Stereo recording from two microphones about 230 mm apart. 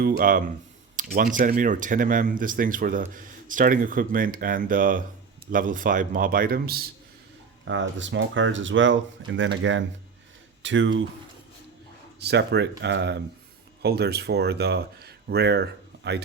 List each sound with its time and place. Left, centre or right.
0.0 s speech: right
7.6 s speech: right
12.2 s speech: right